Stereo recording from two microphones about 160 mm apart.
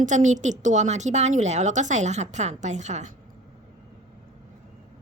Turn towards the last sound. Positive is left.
turn(degrees=-45)  # may be behind; listen again after turning